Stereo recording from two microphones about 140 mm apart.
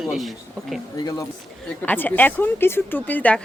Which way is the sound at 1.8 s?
15° left (ahead or behind).